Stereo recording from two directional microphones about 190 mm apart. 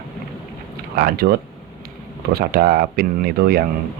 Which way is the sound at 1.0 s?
55° right (ahead or behind).